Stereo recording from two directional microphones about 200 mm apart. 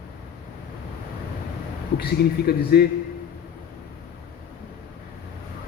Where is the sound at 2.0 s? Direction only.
50° left (ahead or behind).